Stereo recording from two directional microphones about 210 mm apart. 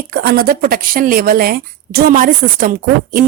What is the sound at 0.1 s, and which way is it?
Speech, 50° right (ahead or behind).